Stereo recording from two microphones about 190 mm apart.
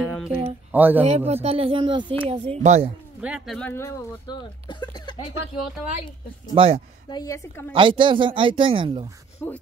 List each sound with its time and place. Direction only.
0.0 s music: centre (ahead or behind)
0.7 s speech: 10° right (ahead or behind)
1.0 s speech: 35° right (ahead or behind)
3.2 s speech: 5° right (ahead or behind); by 5.2 s 25° left (ahead or behind)
6.5 s speech: 30° right (ahead or behind)
7.1 s speech: 20° left (ahead or behind)
7.7 s speech: 25° right (ahead or behind)
9.4 s speech: 10° left (ahead or behind)